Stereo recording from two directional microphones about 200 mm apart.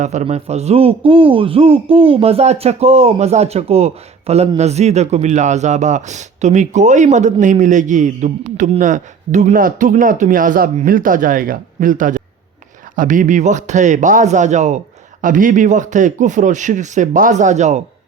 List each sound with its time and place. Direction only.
0.0 s speech: 35° right (ahead or behind)